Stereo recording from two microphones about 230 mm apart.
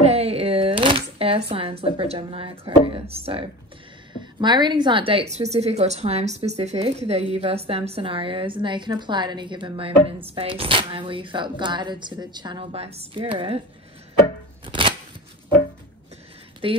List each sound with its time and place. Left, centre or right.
0.0 s a sound: right
1.5 s a woman's voice: right
14.7 s shuffling cards: right
16.6 s a woman's voice: right